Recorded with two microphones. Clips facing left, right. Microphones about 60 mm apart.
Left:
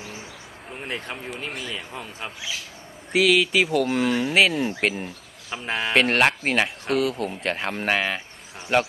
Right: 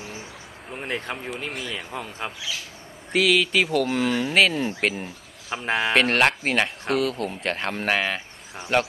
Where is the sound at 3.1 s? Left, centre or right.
Centre.